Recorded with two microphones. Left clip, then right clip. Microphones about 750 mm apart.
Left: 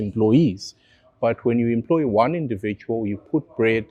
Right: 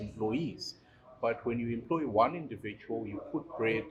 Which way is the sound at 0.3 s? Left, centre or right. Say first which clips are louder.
Left 16 dB; left.